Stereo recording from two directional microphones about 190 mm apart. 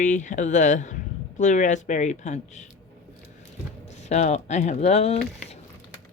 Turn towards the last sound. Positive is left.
turn(degrees=35)  # may be behind; listen again after turning